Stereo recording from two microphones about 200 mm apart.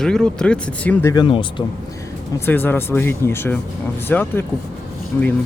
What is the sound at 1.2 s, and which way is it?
Speech, 25° left (ahead or behind).